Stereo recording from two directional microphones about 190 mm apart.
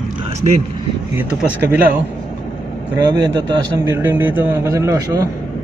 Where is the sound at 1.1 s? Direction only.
10° right (ahead or behind).